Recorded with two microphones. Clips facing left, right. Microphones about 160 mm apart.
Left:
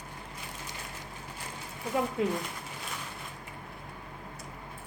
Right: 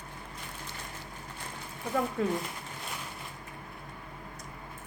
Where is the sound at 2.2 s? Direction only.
20° left (ahead or behind).